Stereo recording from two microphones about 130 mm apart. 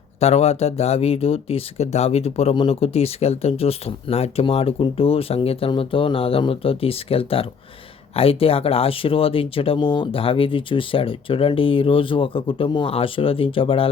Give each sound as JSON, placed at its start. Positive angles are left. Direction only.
{"t": 0.2, "sound": "speech", "side_deg": 55}